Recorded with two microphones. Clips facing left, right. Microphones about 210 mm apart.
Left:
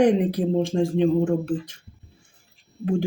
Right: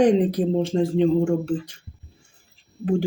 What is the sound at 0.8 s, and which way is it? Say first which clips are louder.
Speech: right 1 dB; 15° left (ahead or behind).